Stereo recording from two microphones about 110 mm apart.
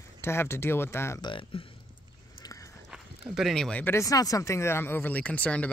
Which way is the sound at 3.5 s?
5° left (ahead or behind).